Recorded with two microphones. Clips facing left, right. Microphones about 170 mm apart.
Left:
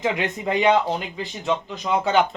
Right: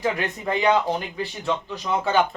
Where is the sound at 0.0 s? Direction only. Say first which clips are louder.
Left 1 dB; 20° left (ahead or behind).